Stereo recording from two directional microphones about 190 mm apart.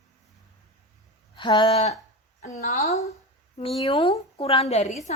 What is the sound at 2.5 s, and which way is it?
A woman's voice, 35° left (ahead or behind).